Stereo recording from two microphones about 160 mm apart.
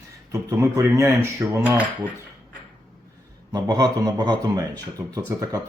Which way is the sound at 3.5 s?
20° right (ahead or behind).